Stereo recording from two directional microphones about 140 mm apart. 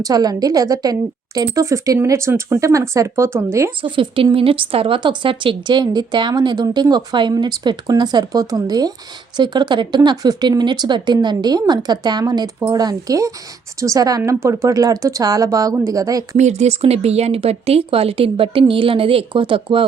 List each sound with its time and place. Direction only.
0.0 s a woman's voice: 25° right (ahead or behind)
3.8 s a woman's voice: 35° right (ahead or behind)
16.4 s speech: 50° right (ahead or behind)